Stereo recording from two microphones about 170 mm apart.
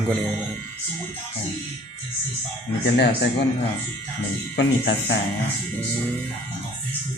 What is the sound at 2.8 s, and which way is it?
Speech, 85° left.